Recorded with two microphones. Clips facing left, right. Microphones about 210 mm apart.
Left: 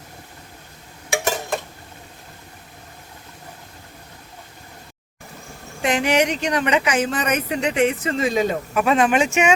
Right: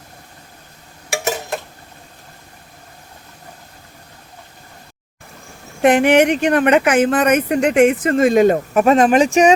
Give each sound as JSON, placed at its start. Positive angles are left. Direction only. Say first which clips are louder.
{"t": 1.1, "sound": "tick-tock", "louder": "right 1 dB", "side_deg": 0}
{"t": 5.8, "sound": "speech", "louder": "right 7 dB", "side_deg": -55}